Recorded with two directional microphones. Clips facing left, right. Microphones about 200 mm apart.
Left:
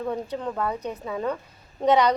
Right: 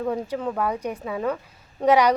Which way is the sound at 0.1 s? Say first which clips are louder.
Right 3 dB; 5° right (ahead or behind).